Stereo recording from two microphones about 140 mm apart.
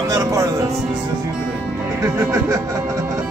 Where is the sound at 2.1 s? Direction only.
20° right (ahead or behind).